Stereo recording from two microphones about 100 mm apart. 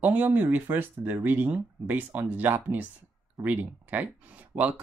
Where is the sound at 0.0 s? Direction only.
15° right (ahead or behind).